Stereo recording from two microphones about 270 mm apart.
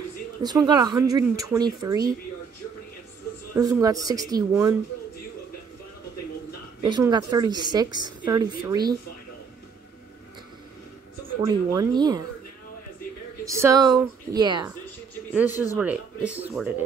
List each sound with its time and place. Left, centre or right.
0.4 s speech: centre
3.8 s speech: centre
6.8 s speech: centre
11.4 s speech: centre
13.5 s speech: centre